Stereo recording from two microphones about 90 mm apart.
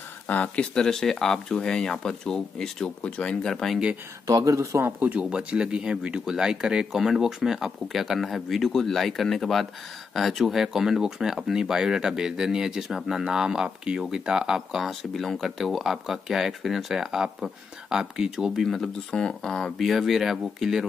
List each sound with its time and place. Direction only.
0.3 s speech: 15° left (ahead or behind)
4.3 s speech: 40° right (ahead or behind)
5.0 s speech: 15° right (ahead or behind)